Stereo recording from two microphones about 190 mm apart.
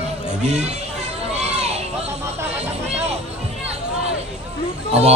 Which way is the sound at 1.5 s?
35° right (ahead or behind).